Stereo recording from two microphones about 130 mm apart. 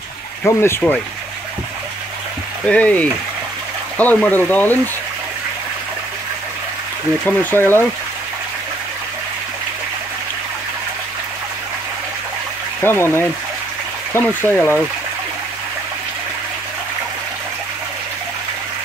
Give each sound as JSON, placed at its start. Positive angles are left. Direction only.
{"t": 0.4, "sound": "speech", "side_deg": 20}
{"t": 2.6, "sound": "speech", "side_deg": 10}
{"t": 7.2, "sound": "speech", "side_deg": 15}
{"t": 12.8, "sound": "speech", "side_deg": 20}